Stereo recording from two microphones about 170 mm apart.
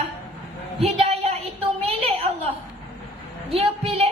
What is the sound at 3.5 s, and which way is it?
Speech, 35° right (ahead or behind).